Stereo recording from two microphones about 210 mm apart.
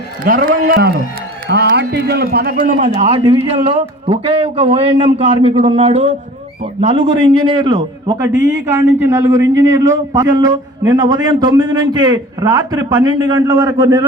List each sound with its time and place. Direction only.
0.3 s a man's voice: 40° right (ahead or behind); by 8.1 s 25° right (ahead or behind)
8.4 s a man's voice: 55° right (ahead or behind)
9.0 s a man's voice: 15° right (ahead or behind)